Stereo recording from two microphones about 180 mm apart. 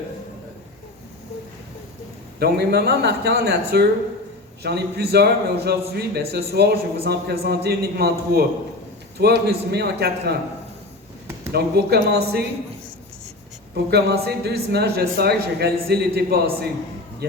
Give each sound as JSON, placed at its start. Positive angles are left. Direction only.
{"t": 2.4, "sound": "speech", "side_deg": -60}
{"t": 11.5, "sound": "speech", "side_deg": -65}
{"t": 13.9, "sound": "speech", "side_deg": -65}